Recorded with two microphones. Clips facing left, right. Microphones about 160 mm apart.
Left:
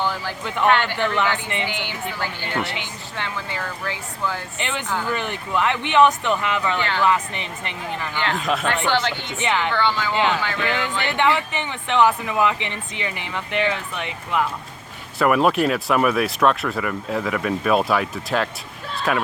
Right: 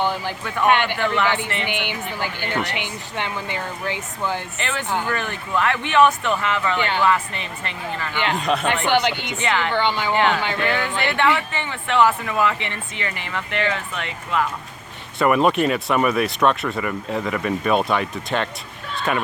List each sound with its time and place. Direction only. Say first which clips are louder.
0.0 s speech: right 2 dB; 20° right (ahead or behind)
4.5 s speech: right 1 dB; 20° left (ahead or behind)
6.7 s speech: right 2 dB; 20° right (ahead or behind)
7.0 s speech: even; 20° left (ahead or behind)
8.1 s speech: right 2 dB; 15° right (ahead or behind)
8.4 s speech: right 2 dB; centre (ahead or behind)
8.9 s speech: right 3 dB; 15° right (ahead or behind)
9.4 s speech: even; 15° left (ahead or behind)
9.7 s speech: right 1 dB; 15° right (ahead or behind)
10.7 s speech: right 2 dB; 20° left (ahead or behind)
15.2 s speech: even; centre (ahead or behind)